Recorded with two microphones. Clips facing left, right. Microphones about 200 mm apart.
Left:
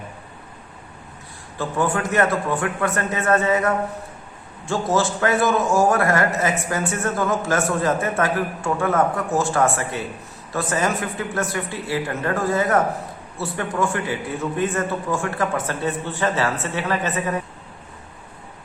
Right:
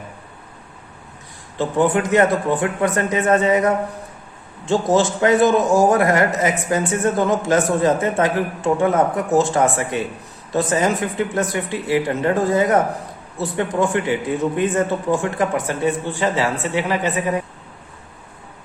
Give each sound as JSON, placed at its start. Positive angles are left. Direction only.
{"t": 1.5, "sound": "a man's voice", "side_deg": -20}